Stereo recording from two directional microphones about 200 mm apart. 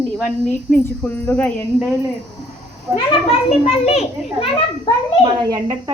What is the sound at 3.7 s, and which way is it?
Speech, 30° left (ahead or behind).